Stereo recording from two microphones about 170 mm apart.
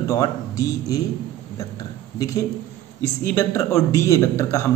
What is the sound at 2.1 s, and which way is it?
A man's voice, 20° left (ahead or behind).